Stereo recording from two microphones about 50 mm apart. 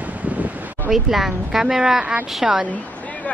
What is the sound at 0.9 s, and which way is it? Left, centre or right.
Speech, centre.